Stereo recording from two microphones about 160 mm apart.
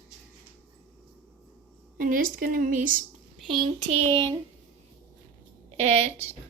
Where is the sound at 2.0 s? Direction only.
55° right (ahead or behind).